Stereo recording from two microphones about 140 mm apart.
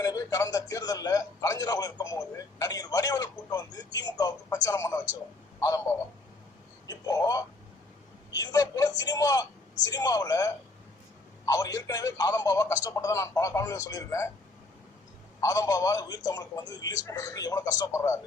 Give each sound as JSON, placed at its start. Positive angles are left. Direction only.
{"t": 0.0, "sound": "a man's voice", "side_deg": 25}
{"t": 15.4, "sound": "speech", "side_deg": 20}